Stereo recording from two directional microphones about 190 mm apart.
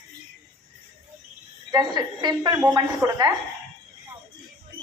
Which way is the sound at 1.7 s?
20° right (ahead or behind).